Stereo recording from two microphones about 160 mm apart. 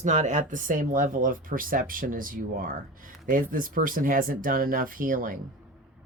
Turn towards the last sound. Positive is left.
turn(degrees=-60)  # may be behind; listen again after turning